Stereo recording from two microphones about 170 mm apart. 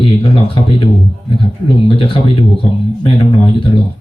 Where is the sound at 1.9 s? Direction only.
30° left (ahead or behind).